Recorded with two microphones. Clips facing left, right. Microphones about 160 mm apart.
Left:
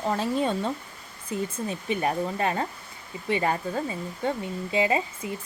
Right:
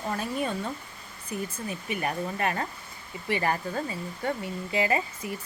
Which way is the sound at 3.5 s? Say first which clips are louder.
Left 2 dB; 5° left (ahead or behind).